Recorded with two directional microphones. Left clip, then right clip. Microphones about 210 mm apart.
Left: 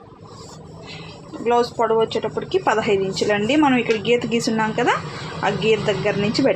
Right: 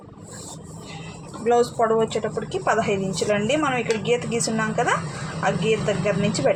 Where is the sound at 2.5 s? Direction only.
45° left (ahead or behind).